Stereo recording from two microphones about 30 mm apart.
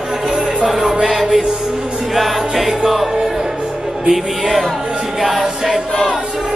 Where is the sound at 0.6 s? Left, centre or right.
Centre.